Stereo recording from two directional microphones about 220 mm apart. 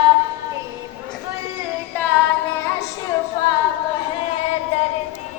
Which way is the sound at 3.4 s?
20° left (ahead or behind).